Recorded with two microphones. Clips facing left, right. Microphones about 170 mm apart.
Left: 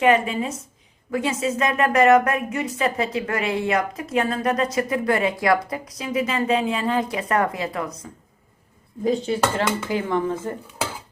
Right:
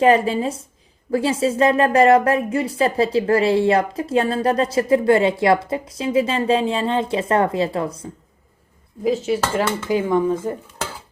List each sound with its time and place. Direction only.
0.0 s a woman's voice: 35° right (ahead or behind)
9.0 s speech: 5° right (ahead or behind)